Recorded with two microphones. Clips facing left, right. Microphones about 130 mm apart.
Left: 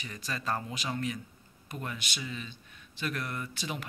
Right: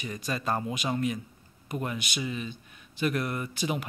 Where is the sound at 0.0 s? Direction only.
15° right (ahead or behind).